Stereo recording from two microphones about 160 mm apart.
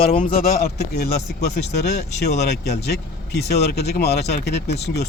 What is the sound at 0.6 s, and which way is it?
Speech, 90° left.